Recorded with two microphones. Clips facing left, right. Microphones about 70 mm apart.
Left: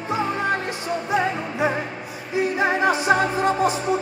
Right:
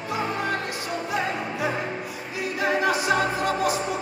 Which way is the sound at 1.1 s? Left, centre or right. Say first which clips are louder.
Left 5 dB; left.